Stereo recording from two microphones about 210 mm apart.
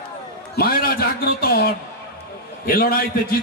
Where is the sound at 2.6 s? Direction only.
45° left (ahead or behind).